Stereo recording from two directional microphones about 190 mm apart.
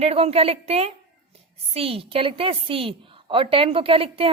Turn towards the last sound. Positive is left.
turn(degrees=-30)  # may be behind; listen again after turning